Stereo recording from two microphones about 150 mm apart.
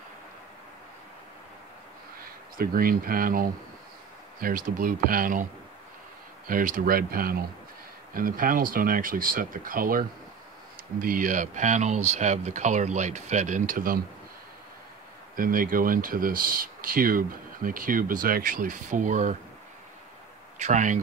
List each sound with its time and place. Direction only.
2.5 s speech: 75° right (ahead or behind)
15.3 s speech: 70° right (ahead or behind)
20.5 s speech: 50° right (ahead or behind)